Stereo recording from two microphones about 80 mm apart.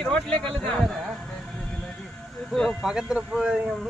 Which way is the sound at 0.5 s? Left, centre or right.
Centre.